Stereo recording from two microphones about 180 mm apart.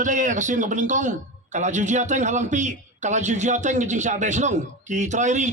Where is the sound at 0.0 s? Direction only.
45° right (ahead or behind).